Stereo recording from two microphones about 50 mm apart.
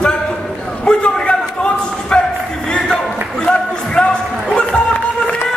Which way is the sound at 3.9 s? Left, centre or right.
Centre.